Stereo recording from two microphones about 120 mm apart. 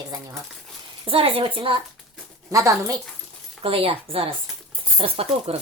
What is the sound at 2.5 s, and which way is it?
Speech, 25° right (ahead or behind).